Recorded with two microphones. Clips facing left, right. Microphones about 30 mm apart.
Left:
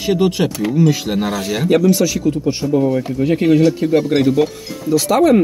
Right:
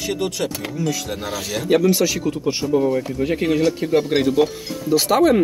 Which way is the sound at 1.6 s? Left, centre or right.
Centre.